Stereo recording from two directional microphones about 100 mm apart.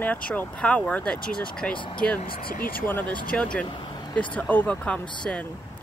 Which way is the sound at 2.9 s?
15° left (ahead or behind).